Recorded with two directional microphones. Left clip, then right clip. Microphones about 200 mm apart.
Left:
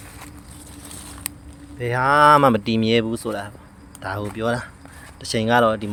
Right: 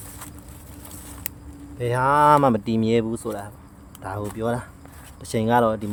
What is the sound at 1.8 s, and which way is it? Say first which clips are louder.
Speech: left 3 dB; 5° right (ahead or behind).